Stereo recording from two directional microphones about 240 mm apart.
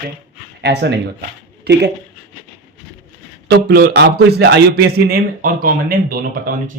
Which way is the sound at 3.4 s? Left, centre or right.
Right.